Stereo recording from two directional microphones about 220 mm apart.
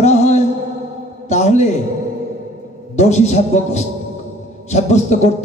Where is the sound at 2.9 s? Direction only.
30° left (ahead or behind).